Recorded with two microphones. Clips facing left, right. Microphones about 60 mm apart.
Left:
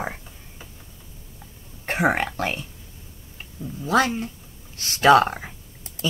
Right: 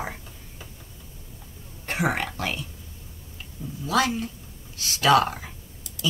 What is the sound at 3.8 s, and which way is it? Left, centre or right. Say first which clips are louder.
Speech: left 3 dB; left.